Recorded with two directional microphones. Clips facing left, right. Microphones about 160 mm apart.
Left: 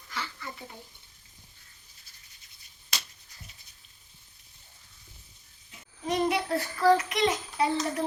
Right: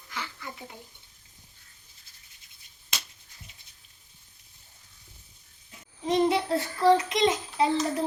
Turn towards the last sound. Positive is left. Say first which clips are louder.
# right 2 dB
turn(degrees=-25)  # may be behind; listen again after turning